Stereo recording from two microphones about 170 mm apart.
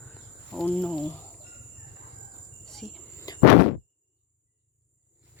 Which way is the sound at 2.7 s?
Centre (ahead or behind).